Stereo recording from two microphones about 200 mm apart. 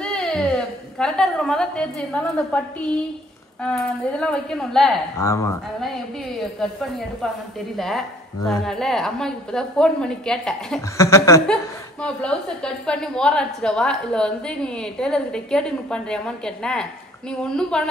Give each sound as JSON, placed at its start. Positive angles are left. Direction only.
{"t": 0.0, "sound": "a woman's voice", "side_deg": 5}
{"t": 3.6, "sound": "a woman's voice", "side_deg": 5}
{"t": 5.1, "sound": "chuckle", "side_deg": 15}
{"t": 6.6, "sound": "a woman's voice", "side_deg": 0}
{"t": 11.0, "sound": "chuckle", "side_deg": 15}
{"t": 12.0, "sound": "a woman's voice", "side_deg": 5}